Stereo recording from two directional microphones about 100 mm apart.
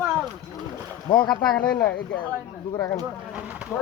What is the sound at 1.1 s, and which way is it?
Speech, 55° left (ahead or behind).